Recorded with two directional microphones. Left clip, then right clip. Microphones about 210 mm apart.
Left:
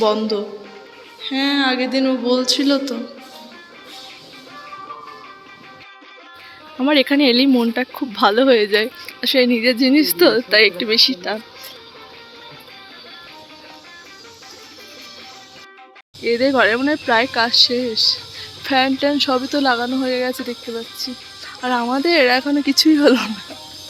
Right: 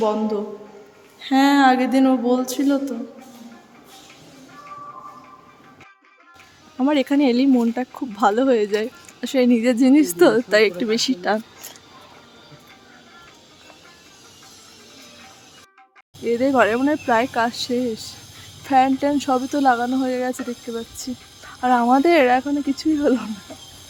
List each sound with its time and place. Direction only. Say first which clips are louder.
0.0 s speech: left 4 dB; centre (ahead or behind)
1.3 s speech: right 3 dB; 20° right (ahead or behind); by 2.8 s 5° right (ahead or behind)
6.7 s speech: left 4 dB; 5° right (ahead or behind); by 11.3 s 20° right (ahead or behind)
16.2 s speech: left 2 dB; centre (ahead or behind)
21.6 s speech: right 3 dB; 10° right (ahead or behind)
22.8 s speech: left 8 dB; 10° left (ahead or behind)